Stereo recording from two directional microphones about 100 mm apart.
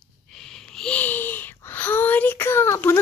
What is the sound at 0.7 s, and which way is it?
Speech, 10° left (ahead or behind).